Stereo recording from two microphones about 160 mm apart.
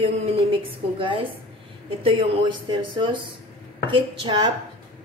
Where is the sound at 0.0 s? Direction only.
35° right (ahead or behind).